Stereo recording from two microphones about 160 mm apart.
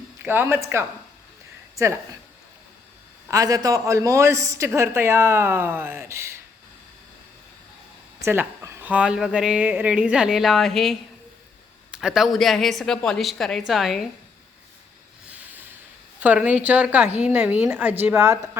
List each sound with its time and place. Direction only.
0.2 s speech: 15° right (ahead or behind)
3.2 s a man's voice: 20° right (ahead or behind)
8.2 s speech: 15° right (ahead or behind); by 14.0 s centre (ahead or behind)
16.2 s speech: 10° right (ahead or behind)